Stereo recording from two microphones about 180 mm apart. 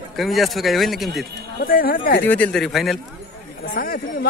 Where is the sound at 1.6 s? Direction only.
55° left (ahead or behind).